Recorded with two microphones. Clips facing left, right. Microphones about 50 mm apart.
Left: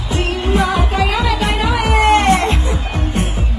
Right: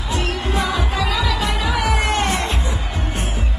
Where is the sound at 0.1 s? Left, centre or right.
Left.